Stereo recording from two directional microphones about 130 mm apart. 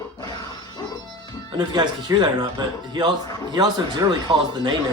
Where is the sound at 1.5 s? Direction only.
35° right (ahead or behind).